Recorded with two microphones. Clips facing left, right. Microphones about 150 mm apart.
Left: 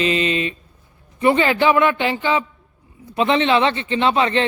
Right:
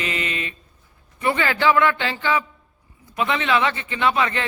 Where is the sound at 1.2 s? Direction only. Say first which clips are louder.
Left 5 dB; 20° left (ahead or behind).